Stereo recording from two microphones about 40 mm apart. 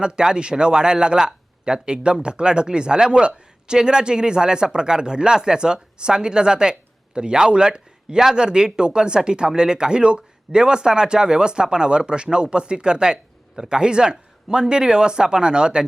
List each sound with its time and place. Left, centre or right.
0.0 s speech: right